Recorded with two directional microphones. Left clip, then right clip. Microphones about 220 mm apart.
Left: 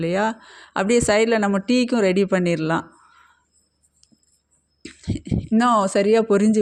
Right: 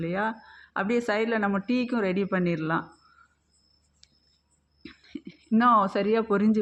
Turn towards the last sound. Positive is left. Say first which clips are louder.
# left 7 dB
turn(degrees=30)  # may be behind; listen again after turning